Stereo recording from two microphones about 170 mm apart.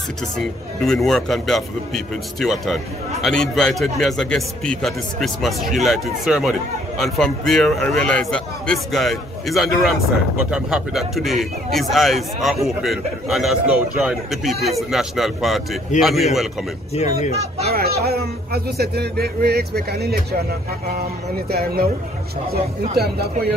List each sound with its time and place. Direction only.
0.4 s a man's voice: centre (ahead or behind)
16.9 s speech: 40° left (ahead or behind)
17.6 s a sound: 65° right (ahead or behind)
18.0 s speech: 65° right (ahead or behind)
21.5 s speech: 65° right (ahead or behind)